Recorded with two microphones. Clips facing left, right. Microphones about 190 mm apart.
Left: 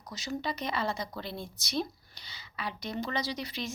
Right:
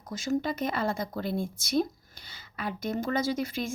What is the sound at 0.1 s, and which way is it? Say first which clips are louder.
Speech: right 6 dB; 50° right (ahead or behind).